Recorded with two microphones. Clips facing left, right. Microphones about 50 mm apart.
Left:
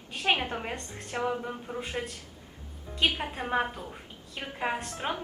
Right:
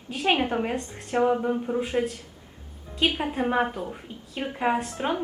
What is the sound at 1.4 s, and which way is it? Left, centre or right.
A woman's voice, centre.